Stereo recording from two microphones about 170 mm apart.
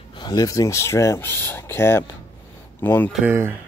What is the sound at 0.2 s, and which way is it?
Speech, 25° left (ahead or behind).